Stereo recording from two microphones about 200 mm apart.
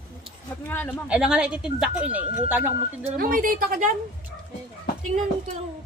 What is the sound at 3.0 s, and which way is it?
Speech, 45° right (ahead or behind).